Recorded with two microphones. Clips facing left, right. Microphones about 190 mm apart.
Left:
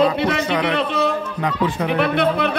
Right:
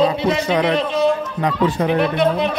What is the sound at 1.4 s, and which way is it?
Speech, 35° right (ahead or behind).